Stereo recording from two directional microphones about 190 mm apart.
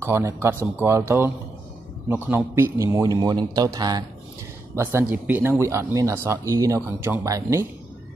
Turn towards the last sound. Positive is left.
turn(degrees=-15)  # may be behind; listen again after turning